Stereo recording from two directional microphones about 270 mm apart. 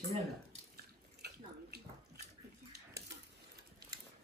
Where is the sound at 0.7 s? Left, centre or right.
Right.